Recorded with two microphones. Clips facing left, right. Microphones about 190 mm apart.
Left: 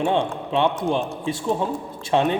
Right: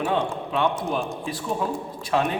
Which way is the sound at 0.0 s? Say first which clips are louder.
Left 3 dB; 30° left (ahead or behind).